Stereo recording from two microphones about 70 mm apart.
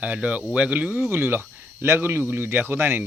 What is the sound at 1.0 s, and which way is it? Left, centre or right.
Speech, right.